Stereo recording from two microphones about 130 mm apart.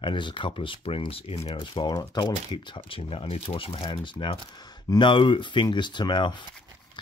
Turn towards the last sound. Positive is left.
turn(degrees=35)  # may be behind; listen again after turning